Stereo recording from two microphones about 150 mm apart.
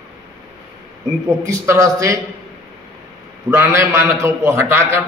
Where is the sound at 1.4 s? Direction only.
20° right (ahead or behind).